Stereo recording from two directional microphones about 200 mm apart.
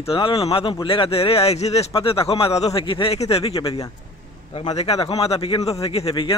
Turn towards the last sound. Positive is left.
turn(degrees=30)  # may be behind; listen again after turning